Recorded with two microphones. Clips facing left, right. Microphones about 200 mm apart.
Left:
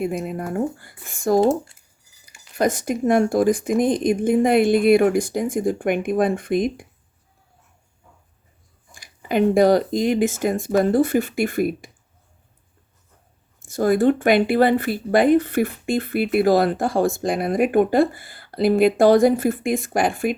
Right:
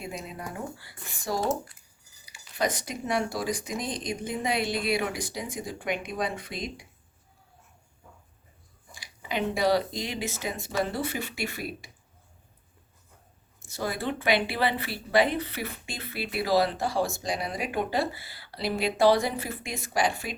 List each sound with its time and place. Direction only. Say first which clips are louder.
0.0 s speech: left 12 dB; 55° left (ahead or behind)
8.9 s speech: left 10 dB; 50° left (ahead or behind)
13.7 s speech: left 14 dB; 50° left (ahead or behind)